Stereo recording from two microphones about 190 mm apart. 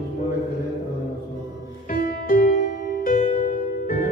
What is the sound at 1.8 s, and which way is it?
Music, 45° left (ahead or behind).